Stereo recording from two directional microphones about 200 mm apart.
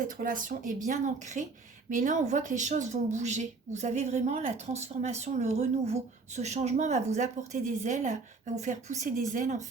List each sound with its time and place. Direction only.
0.1 s speech: 45° right (ahead or behind)